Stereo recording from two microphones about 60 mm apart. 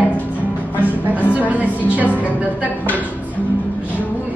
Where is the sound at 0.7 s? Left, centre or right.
Right.